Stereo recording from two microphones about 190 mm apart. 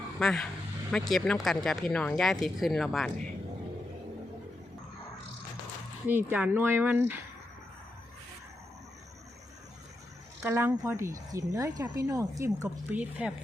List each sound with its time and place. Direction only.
0.2 s speech: centre (ahead or behind)
6.1 s speech: 10° right (ahead or behind)
10.4 s speech: 15° right (ahead or behind)